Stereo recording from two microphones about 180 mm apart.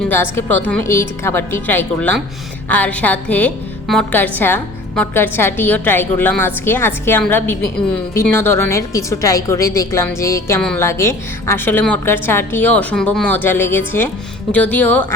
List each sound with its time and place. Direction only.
0.1 s a woman's voice: 10° left (ahead or behind)